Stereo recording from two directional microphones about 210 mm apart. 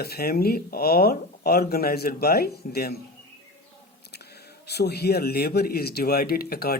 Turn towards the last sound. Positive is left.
turn(degrees=45)  # may be behind; listen again after turning